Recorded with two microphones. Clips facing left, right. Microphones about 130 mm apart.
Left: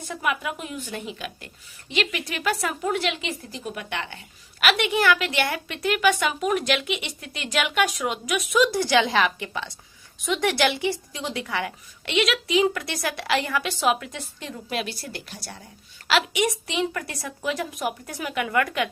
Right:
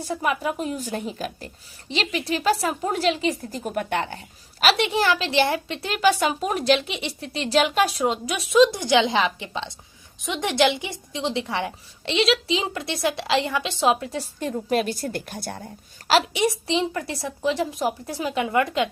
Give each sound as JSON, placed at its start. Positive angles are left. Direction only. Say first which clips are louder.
{"t": 0.1, "sound": "a woman's voice", "louder": "right 3 dB", "side_deg": -35}